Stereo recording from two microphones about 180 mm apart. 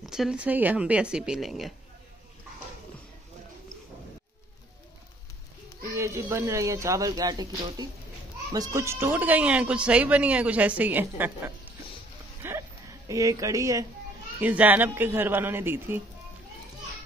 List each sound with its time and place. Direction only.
0.0 s speech: centre (ahead or behind)
5.9 s speech: 15° right (ahead or behind)
12.4 s a sound: 15° right (ahead or behind)
13.1 s speech: 20° right (ahead or behind)